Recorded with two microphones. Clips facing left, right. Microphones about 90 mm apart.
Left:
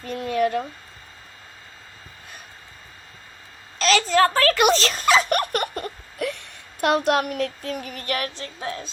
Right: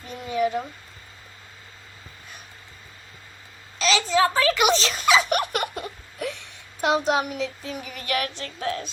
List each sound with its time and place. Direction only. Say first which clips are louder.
0.2 s speech: left 2 dB; 60° left (ahead or behind)
3.8 s a sound: left 3 dB; 45° left (ahead or behind)
4.1 s speech: left 1 dB; 50° left (ahead or behind)
6.1 s child singing: left 3 dB; 55° left (ahead or behind)
7.9 s child singing: right 4 dB; 40° left (ahead or behind)
8.5 s a woman's voice: right 6 dB; 25° left (ahead or behind)